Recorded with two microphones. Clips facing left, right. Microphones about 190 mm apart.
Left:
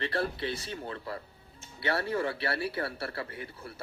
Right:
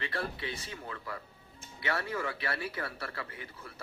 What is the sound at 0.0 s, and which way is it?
Speech, 35° left (ahead or behind).